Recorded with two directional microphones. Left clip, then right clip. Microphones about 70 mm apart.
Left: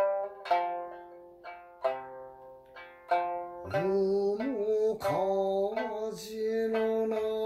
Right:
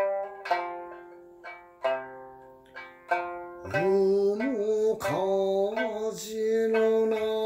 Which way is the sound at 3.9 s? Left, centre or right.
Centre.